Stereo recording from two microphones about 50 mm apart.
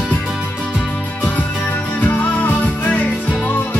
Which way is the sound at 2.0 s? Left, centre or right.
Left.